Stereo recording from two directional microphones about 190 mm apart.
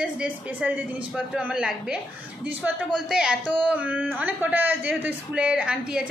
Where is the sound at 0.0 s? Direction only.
5° right (ahead or behind).